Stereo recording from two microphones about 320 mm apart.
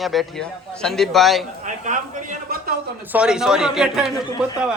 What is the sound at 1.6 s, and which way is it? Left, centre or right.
A man's voice, right.